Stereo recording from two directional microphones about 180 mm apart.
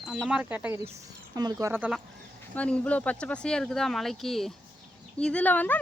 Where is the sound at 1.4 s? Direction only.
20° right (ahead or behind).